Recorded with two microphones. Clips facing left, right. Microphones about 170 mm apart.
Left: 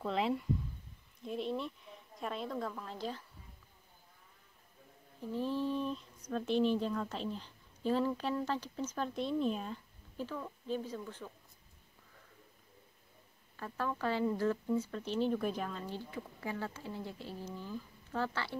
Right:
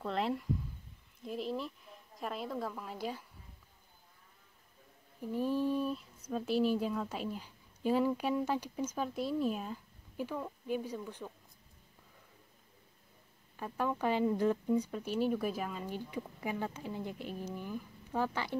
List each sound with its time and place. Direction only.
0.0 s speech: centre (ahead or behind)
5.2 s speech: 10° right (ahead or behind)
13.6 s speech: 15° right (ahead or behind)